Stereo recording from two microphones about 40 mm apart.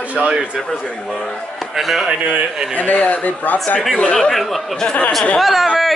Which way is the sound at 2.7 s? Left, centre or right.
Left.